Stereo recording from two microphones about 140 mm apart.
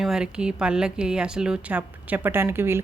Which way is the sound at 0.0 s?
5° right (ahead or behind).